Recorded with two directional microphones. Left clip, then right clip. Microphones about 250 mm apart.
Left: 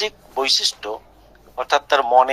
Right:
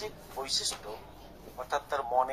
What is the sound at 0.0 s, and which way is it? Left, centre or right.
A man's voice, left.